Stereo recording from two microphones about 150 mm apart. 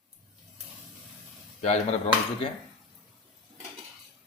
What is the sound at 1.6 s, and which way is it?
Speech, 45° left (ahead or behind).